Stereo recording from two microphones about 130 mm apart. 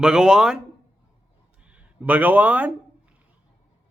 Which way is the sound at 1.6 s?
10° right (ahead or behind).